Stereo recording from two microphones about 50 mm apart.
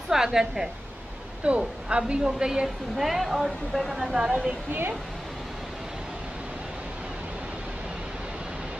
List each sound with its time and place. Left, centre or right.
0.1 s a woman's voice: centre
1.4 s a woman's voice: right